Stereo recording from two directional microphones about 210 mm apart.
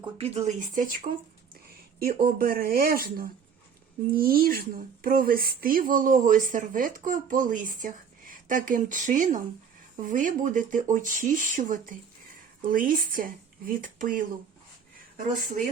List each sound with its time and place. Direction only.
0.0 s speech: 30° right (ahead or behind)
2.0 s speech: 45° right (ahead or behind)